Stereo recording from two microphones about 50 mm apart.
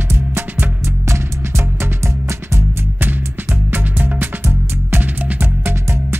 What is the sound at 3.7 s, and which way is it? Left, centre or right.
Music, right.